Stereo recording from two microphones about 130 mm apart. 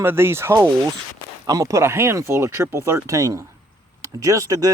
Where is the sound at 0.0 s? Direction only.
20° right (ahead or behind).